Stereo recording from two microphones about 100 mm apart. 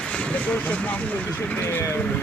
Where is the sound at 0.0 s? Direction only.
10° left (ahead or behind).